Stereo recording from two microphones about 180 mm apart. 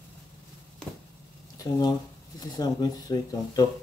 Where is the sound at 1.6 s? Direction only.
20° left (ahead or behind).